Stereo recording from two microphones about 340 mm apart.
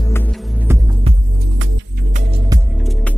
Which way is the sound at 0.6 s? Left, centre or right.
Centre.